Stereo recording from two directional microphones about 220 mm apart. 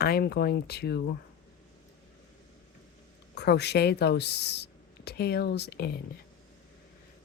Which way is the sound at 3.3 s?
50° left (ahead or behind).